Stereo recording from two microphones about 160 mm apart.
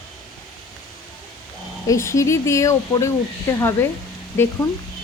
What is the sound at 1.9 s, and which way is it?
Speech, 20° left (ahead or behind).